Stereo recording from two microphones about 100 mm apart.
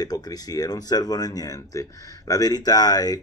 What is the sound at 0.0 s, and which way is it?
Speech, 40° left (ahead or behind).